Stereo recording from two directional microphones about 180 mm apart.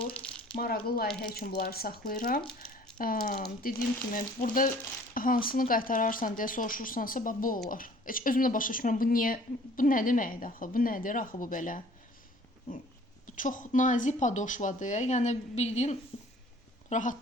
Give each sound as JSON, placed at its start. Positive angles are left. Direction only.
{"t": 0.1, "sound": "a sound", "side_deg": 5}
{"t": 0.5, "sound": "speech", "side_deg": 55}
{"t": 13.2, "sound": "speech", "side_deg": 45}